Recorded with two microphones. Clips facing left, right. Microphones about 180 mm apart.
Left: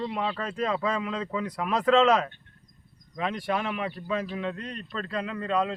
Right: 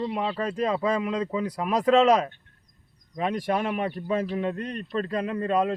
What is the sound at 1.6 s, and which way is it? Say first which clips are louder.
Speech: right 2 dB; 10° right (ahead or behind).